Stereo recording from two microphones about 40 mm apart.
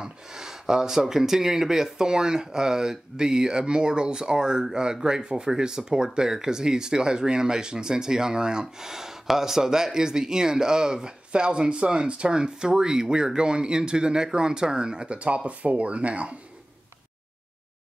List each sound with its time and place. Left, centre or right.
0.0 s speech: centre
15.1 s speech: right